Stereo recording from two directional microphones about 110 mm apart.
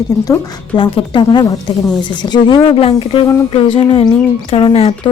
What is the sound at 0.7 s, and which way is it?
A woman's voice, 50° left (ahead or behind).